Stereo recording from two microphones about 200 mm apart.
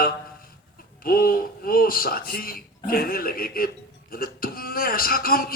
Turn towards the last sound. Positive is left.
turn(degrees=45)  # may be behind; listen again after turning